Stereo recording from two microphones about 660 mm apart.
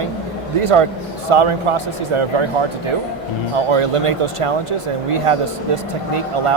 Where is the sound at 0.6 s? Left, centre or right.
Right.